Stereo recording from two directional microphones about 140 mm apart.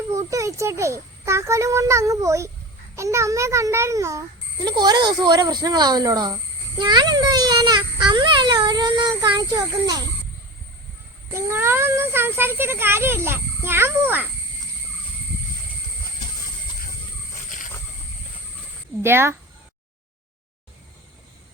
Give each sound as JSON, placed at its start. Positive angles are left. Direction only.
{"t": 0.1, "sound": "a child's voice", "side_deg": -25}
{"t": 11.3, "sound": "a child's voice", "side_deg": -20}
{"t": 19.0, "sound": "a child's voice", "side_deg": -15}